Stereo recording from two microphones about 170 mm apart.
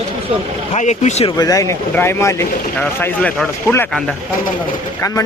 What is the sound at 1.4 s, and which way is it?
Speech, 20° left (ahead or behind).